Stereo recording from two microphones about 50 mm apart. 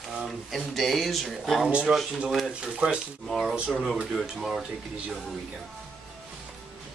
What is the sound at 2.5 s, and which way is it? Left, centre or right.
Speech, centre.